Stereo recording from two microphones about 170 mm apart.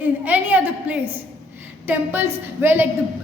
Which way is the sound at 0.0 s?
10° right (ahead or behind).